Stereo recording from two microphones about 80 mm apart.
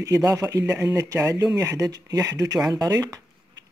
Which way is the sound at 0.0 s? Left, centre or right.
Right.